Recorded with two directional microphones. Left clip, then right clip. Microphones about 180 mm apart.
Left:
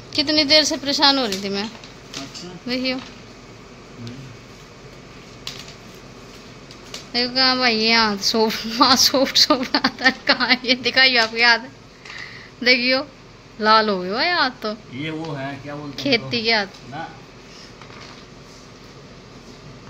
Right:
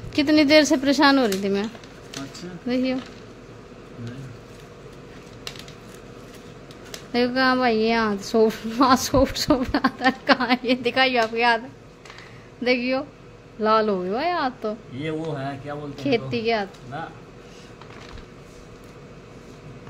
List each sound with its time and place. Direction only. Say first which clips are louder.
0.1 s speech: even; 40° right (ahead or behind); by 3.0 s 25° right (ahead or behind)
7.1 s speech: left 2 dB; 40° right (ahead or behind); by 11.6 s 15° right (ahead or behind)
12.6 s speech: left 5 dB; 10° right (ahead or behind)